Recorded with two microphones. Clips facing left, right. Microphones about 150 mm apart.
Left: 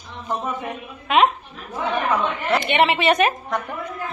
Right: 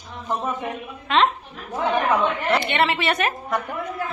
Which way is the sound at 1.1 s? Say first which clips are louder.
Left 2 dB; 10° left (ahead or behind).